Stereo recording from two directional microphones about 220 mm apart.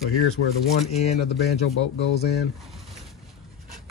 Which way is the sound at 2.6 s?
Centre (ahead or behind).